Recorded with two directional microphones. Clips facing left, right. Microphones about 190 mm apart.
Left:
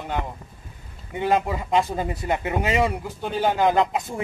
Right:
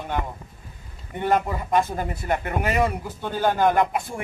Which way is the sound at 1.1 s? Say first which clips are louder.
Left 1 dB; 15° left (ahead or behind).